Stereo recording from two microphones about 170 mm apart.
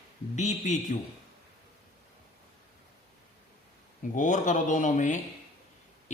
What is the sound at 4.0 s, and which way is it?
Speech, 45° left (ahead or behind).